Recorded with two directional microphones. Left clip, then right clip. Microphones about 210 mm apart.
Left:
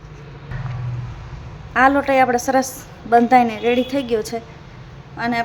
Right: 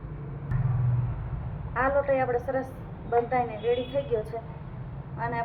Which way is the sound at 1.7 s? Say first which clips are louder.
Left 10 dB; 65° left (ahead or behind).